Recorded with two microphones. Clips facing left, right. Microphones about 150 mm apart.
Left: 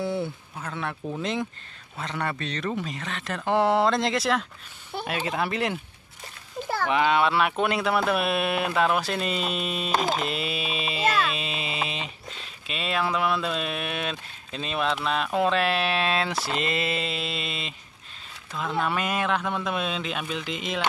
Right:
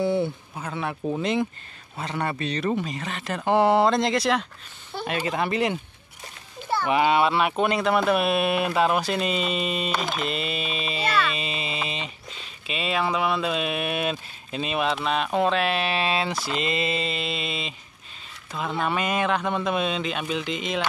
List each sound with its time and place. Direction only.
0.0 s a man's voice: centre (ahead or behind)
6.9 s speech: 5° right (ahead or behind)
9.8 s a sound: 35° left (ahead or behind)
10.2 s speech: 5° left (ahead or behind)